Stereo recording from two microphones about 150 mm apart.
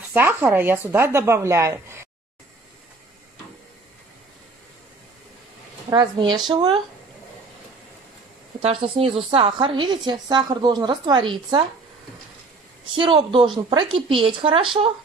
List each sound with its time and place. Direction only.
0.1 s speech: 15° right (ahead or behind)
5.9 s a woman's voice: 30° right (ahead or behind)
8.6 s a woman's voice: 40° right (ahead or behind)
12.9 s a woman's voice: 35° right (ahead or behind)